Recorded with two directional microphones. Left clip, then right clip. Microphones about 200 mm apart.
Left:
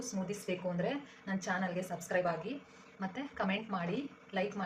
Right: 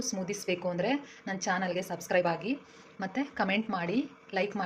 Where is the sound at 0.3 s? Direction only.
40° right (ahead or behind).